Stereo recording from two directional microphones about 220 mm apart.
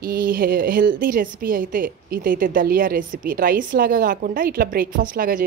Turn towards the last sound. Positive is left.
turn(degrees=-40)  # may be behind; listen again after turning